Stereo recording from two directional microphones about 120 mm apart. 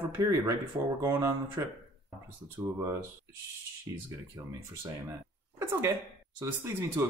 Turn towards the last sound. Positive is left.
turn(degrees=-20)  # may be behind; listen again after turning